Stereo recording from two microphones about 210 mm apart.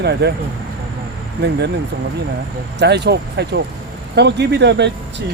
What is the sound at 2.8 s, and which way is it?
Speech, 55° right (ahead or behind).